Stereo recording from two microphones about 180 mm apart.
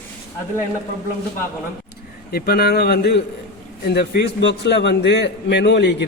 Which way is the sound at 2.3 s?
60° left (ahead or behind).